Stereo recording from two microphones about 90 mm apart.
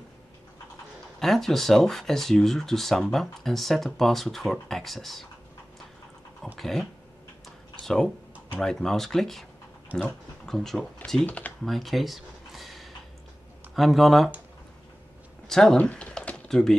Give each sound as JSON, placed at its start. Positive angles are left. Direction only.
{"t": 1.2, "sound": "speech", "side_deg": 0}
{"t": 6.4, "sound": "dog", "side_deg": 5}
{"t": 7.8, "sound": "speech", "side_deg": 5}
{"t": 11.2, "sound": "speech", "side_deg": 15}
{"t": 11.6, "sound": "a sound", "side_deg": 0}
{"t": 13.7, "sound": "speech", "side_deg": 0}
{"t": 15.4, "sound": "speech", "side_deg": 5}
{"t": 15.8, "sound": "typing", "side_deg": 15}